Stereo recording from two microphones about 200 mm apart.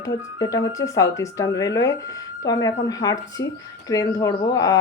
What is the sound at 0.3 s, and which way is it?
Speech, 20° left (ahead or behind).